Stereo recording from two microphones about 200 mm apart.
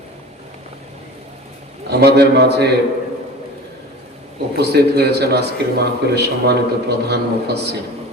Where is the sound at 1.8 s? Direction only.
55° right (ahead or behind).